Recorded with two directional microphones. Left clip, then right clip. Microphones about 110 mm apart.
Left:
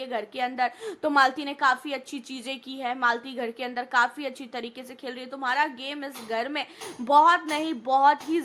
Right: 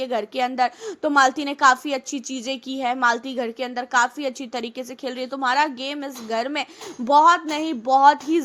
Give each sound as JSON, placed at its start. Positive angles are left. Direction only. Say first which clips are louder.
{"t": 0.0, "sound": "a woman's voice", "louder": "right 6 dB", "side_deg": -50}
{"t": 0.9, "sound": "a woman's voice", "louder": "right 3 dB", "side_deg": -30}
{"t": 1.4, "sound": "a woman's voice", "louder": "right 7 dB", "side_deg": -60}
{"t": 4.3, "sound": "a woman's voice", "louder": "right 6 dB", "side_deg": -50}
{"t": 7.0, "sound": "a woman's voice", "louder": "right 4 dB", "side_deg": -30}